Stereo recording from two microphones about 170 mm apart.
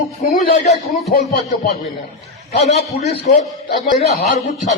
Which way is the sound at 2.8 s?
40° left (ahead or behind).